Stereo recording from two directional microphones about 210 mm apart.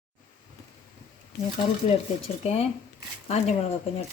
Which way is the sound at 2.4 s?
30° left (ahead or behind).